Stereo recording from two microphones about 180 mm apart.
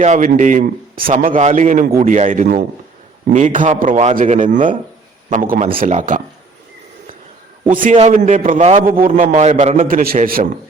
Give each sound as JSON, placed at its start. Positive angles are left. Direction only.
{"t": 0.0, "sound": "a man's voice", "side_deg": -40}
{"t": 7.9, "sound": "a man's voice", "side_deg": -40}
{"t": 9.8, "sound": "speech", "side_deg": -55}